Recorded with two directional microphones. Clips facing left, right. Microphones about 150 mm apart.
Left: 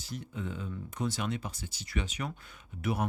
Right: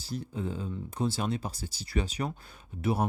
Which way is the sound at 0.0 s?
35° right (ahead or behind).